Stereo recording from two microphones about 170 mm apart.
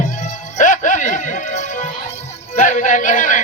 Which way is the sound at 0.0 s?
45° left (ahead or behind).